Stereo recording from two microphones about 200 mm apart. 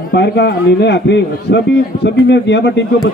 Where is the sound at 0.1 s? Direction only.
55° left (ahead or behind).